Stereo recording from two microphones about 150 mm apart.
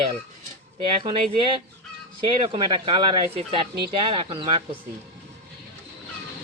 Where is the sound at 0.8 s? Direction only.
35° right (ahead or behind).